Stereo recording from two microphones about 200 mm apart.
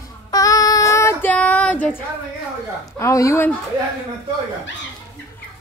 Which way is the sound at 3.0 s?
15° left (ahead or behind).